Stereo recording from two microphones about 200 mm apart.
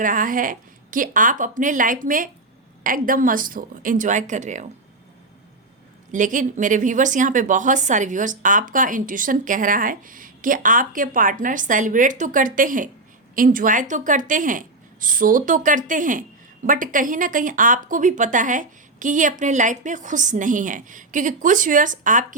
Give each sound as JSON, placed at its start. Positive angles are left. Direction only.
{"t": 0.0, "sound": "a woman's voice", "side_deg": -40}
{"t": 6.1, "sound": "a woman's voice", "side_deg": -40}